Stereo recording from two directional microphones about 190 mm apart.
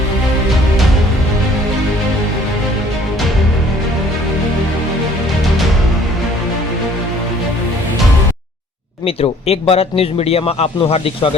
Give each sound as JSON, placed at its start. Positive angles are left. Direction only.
{"t": 9.0, "sound": "a man's voice", "side_deg": 30}